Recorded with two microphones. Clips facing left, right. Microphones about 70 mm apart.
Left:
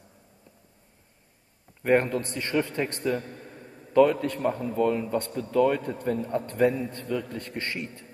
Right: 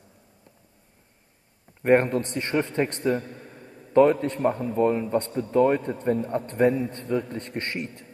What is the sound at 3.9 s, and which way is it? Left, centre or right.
A man's voice, right.